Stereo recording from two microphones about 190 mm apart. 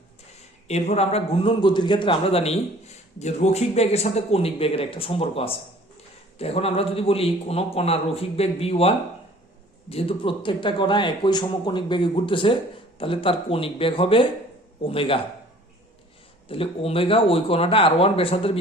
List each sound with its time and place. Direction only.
0.7 s a man's voice: 35° left (ahead or behind)
9.9 s a man's voice: 30° left (ahead or behind)
16.5 s a man's voice: 30° left (ahead or behind)